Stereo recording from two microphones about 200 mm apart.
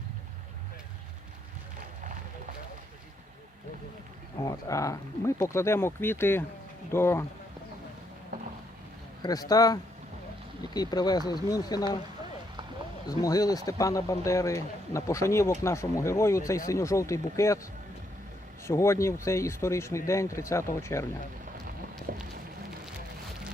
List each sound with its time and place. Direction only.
4.4 s speech: 15° left (ahead or behind)
9.2 s speech: 20° left (ahead or behind)
10.8 s speech: 20° left (ahead or behind)
13.1 s speech: 20° left (ahead or behind)
18.6 s speech: 15° left (ahead or behind)
22.1 s a sound: 45° right (ahead or behind)